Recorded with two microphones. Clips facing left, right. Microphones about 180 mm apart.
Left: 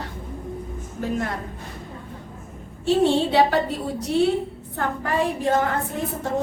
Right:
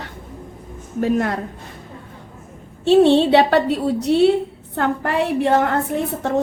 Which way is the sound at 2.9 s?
70° right (ahead or behind).